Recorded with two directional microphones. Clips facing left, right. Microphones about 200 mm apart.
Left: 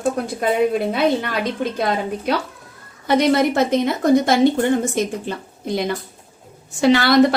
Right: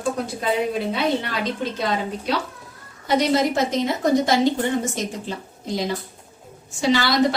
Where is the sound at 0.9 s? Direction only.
55° left (ahead or behind).